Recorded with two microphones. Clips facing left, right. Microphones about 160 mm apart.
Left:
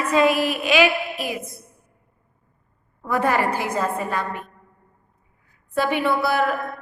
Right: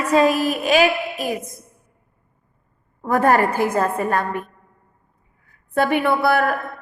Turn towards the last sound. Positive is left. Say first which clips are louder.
# right 3 dB
turn(degrees=-55)  # may be behind; listen again after turning